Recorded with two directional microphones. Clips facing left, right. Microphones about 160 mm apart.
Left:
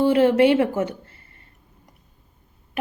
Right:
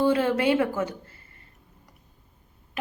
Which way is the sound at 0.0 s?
25° left (ahead or behind).